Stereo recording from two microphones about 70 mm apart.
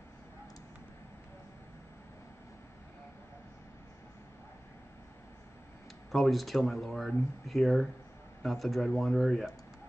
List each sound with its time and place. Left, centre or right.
6.1 s speech: centre